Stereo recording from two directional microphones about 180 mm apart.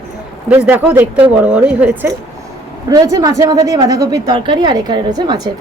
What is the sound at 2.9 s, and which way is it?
Speech, 20° right (ahead or behind).